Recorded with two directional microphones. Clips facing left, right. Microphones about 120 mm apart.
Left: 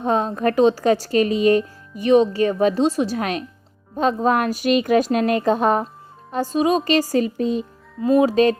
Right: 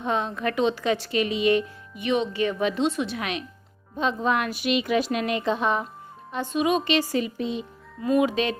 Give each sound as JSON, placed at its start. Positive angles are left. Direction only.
{"t": 0.0, "sound": "a woman's voice", "side_deg": 40}